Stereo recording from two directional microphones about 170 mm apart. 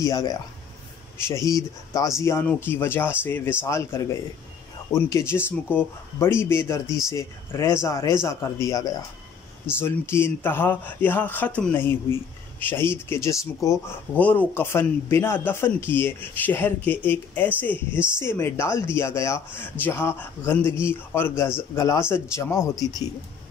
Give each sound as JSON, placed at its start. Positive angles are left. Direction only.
{"t": 0.0, "sound": "speech", "side_deg": 20}